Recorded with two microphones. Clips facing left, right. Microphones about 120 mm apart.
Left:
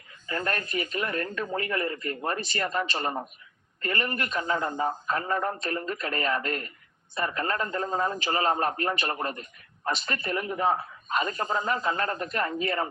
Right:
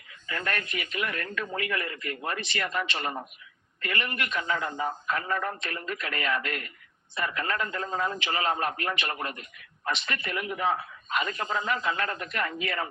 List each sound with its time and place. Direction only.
0.3 s a man's voice: 35° left (ahead or behind)